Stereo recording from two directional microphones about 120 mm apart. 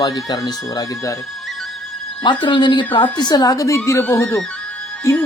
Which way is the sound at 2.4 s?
40° left (ahead or behind).